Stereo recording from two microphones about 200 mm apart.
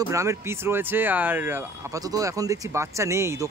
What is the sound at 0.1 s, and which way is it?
Speech, 15° right (ahead or behind).